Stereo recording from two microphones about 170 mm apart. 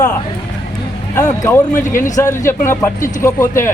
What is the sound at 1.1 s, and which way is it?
Speech, 20° left (ahead or behind).